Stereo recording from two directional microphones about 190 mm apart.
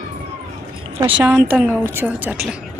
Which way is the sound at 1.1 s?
10° right (ahead or behind).